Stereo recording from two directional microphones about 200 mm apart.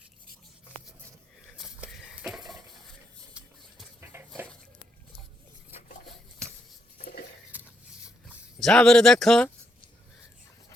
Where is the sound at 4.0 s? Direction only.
10° right (ahead or behind).